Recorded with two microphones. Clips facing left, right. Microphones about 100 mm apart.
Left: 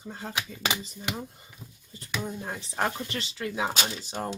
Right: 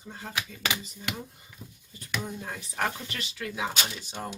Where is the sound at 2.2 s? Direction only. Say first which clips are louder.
Left 2 dB; 25° left (ahead or behind).